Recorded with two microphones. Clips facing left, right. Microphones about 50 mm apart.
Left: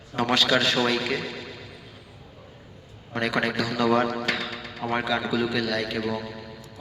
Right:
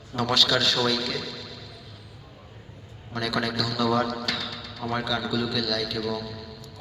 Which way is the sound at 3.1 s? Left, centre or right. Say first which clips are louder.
Left 2 dB; left.